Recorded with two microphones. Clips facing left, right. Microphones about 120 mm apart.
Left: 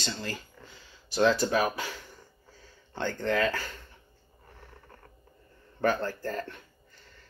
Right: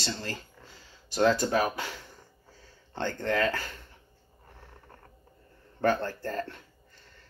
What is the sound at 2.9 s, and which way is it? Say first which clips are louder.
Speech: even; 40° right (ahead or behind).